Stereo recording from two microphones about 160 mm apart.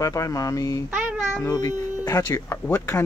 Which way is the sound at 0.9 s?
5° right (ahead or behind).